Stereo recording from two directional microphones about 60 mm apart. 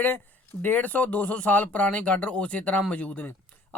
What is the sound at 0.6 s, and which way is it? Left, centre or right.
Speech, left.